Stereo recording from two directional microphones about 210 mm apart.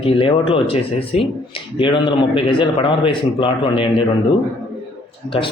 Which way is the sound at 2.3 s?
25° left (ahead or behind).